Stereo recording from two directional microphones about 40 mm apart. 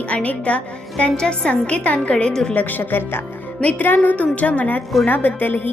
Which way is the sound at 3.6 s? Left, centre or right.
Left.